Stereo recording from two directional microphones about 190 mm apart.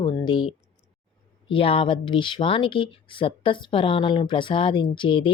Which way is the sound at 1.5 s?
30° left (ahead or behind).